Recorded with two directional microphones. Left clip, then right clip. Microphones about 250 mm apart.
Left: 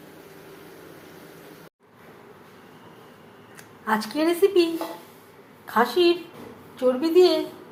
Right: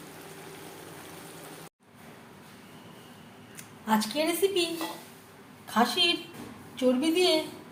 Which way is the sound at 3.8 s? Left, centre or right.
Centre.